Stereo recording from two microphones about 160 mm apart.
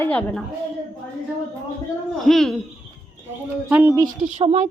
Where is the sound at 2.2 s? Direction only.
Centre (ahead or behind).